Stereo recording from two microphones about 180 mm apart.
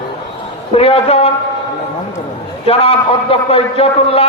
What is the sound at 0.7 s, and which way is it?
Speech, 35° left (ahead or behind).